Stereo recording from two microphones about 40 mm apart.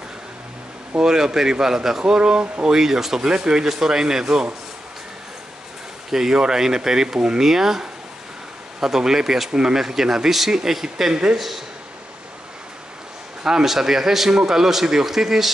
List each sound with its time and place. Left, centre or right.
1.0 s a man's voice: centre
2.1 s a man's voice: right
6.1 s a man's voice: centre
8.8 s a man's voice: centre
13.4 s a man's voice: centre